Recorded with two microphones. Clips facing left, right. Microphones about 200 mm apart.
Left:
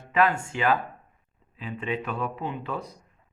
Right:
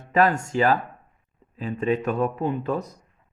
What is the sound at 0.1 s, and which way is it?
Speech, 40° right (ahead or behind).